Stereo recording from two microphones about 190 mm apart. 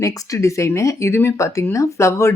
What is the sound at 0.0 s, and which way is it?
Speech, 15° left (ahead or behind).